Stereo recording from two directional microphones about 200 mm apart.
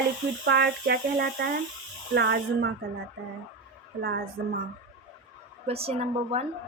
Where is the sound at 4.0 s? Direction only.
50° right (ahead or behind).